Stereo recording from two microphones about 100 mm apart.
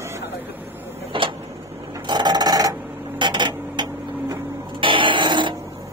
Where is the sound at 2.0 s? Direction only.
45° right (ahead or behind).